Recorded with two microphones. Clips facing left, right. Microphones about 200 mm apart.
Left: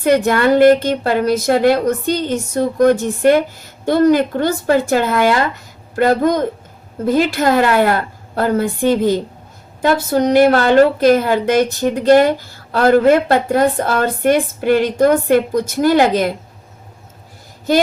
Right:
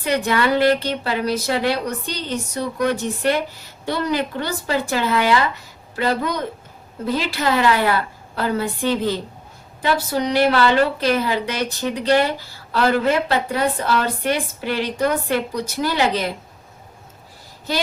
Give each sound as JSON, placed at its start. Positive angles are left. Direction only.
{"t": 0.0, "sound": "a woman's voice", "side_deg": 50}